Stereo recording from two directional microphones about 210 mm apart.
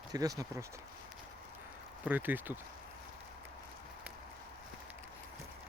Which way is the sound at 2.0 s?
10° right (ahead or behind).